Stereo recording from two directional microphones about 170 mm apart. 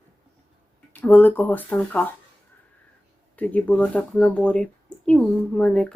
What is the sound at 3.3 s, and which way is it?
Speech, 10° left (ahead or behind).